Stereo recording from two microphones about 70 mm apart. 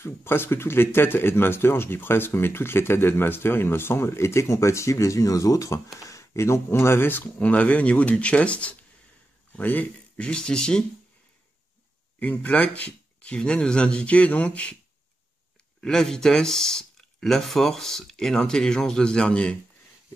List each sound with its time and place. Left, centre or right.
0.0 s speech: left
10.2 s speech: centre
12.2 s speech: left
15.8 s speech: centre